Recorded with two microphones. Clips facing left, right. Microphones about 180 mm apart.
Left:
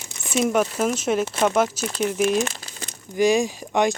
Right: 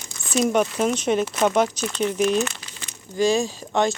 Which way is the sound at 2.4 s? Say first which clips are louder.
Left 1 dB; 40° left (ahead or behind).